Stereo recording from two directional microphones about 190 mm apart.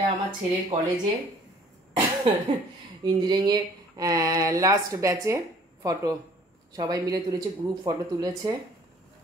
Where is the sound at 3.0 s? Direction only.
25° right (ahead or behind).